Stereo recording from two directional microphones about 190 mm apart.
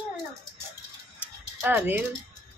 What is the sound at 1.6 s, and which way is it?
Speech, 10° right (ahead or behind).